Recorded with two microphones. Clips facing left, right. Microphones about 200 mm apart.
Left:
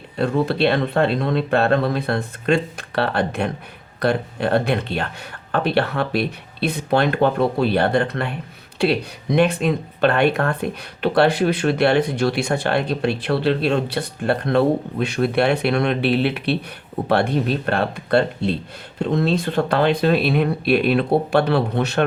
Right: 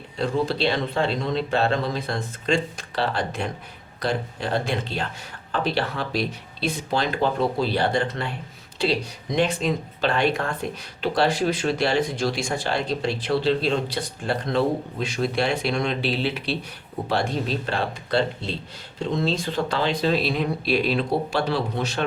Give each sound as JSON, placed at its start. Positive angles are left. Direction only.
{"t": 0.2, "sound": "speech", "side_deg": 60}